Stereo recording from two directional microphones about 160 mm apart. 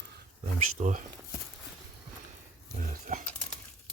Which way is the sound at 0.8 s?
50° right (ahead or behind).